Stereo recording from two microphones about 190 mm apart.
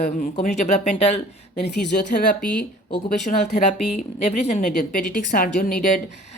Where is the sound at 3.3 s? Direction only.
40° left (ahead or behind).